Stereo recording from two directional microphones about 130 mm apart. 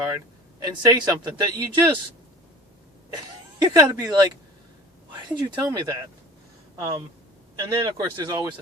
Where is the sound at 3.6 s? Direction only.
30° right (ahead or behind).